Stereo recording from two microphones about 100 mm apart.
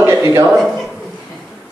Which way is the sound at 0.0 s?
30° right (ahead or behind).